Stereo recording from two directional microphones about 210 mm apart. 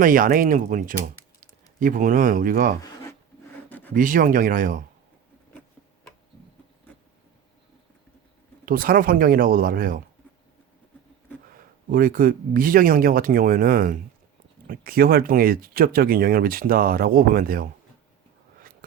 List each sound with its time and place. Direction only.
0.0 s speech: 40° right (ahead or behind)
2.8 s a sound: 15° left (ahead or behind)
3.9 s speech: 40° right (ahead or behind)
8.6 s speech: 45° right (ahead or behind)
11.5 s speech: 40° right (ahead or behind)